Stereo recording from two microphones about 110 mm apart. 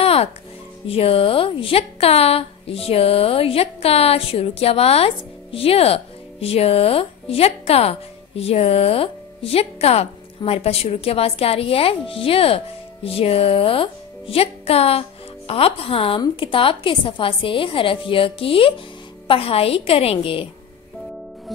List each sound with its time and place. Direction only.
0.0 s music: 65° left (ahead or behind)
0.8 s a woman's voice: 60° left (ahead or behind)